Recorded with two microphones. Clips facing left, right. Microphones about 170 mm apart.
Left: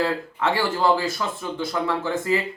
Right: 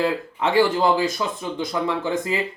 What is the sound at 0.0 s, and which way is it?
Speech, 20° right (ahead or behind).